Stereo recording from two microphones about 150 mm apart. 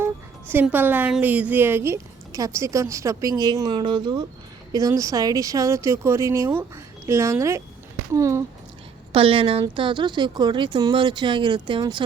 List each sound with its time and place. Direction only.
0.5 s speech: 10° right (ahead or behind)
9.1 s speech: 35° right (ahead or behind)